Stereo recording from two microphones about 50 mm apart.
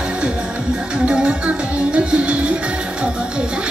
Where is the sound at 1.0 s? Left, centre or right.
Right.